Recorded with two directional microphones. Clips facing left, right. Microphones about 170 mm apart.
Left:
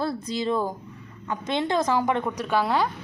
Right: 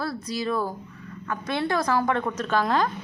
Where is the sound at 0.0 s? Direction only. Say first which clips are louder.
Left 2 dB; 25° left (ahead or behind).